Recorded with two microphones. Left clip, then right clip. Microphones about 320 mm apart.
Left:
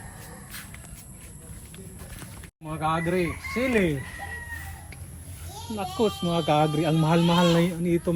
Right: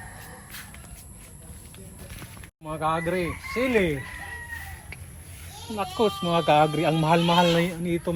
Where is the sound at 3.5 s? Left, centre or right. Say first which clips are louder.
Right 2 dB; centre.